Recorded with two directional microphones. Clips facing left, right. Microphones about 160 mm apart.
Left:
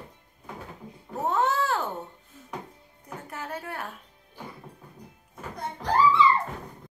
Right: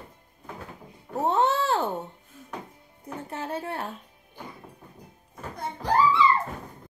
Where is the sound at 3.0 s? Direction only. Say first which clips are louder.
Right 4 dB; 30° right (ahead or behind).